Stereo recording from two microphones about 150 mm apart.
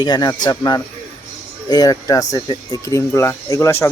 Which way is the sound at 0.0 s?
25° left (ahead or behind).